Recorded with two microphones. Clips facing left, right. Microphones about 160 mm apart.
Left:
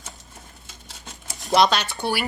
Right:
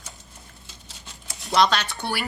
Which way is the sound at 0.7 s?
50° left (ahead or behind).